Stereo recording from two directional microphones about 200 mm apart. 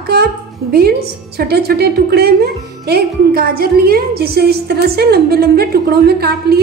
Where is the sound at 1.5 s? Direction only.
50° right (ahead or behind).